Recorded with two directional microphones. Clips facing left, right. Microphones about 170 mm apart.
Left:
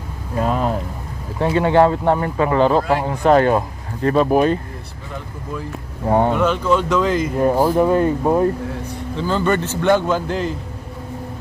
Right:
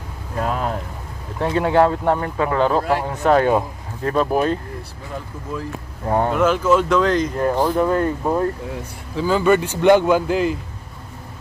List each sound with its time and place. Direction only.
0.4 s speech: 5° left (ahead or behind)
6.0 s speech: 10° left (ahead or behind)
6.3 s speech: 5° right (ahead or behind); by 8.5 s 20° left (ahead or behind)
9.1 s speech: 10° right (ahead or behind)